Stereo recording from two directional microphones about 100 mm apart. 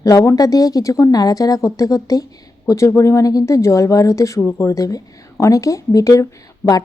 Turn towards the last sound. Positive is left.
turn(degrees=20)  # may be behind; listen again after turning